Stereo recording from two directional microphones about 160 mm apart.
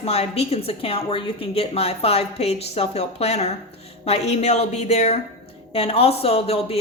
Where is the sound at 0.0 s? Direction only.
40° left (ahead or behind).